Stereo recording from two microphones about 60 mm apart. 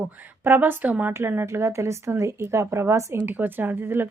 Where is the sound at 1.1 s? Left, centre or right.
Right.